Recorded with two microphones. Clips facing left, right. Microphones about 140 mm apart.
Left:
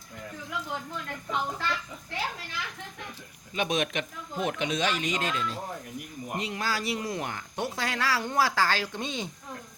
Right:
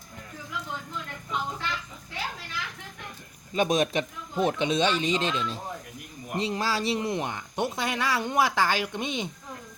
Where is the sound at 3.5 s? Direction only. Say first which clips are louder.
Right 4 dB; 35° right (ahead or behind); by 9.3 s 20° right (ahead or behind).